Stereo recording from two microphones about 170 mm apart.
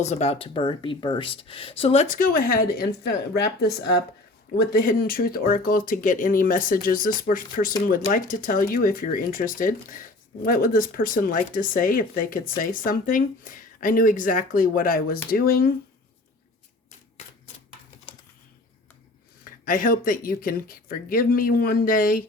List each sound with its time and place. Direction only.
0.0 s speech: 40° left (ahead or behind)
2.1 s speech: 55° left (ahead or behind)
19.6 s speech: 55° left (ahead or behind)